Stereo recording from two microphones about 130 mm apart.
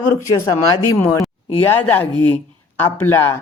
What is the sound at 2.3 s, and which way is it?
Speech, 15° left (ahead or behind).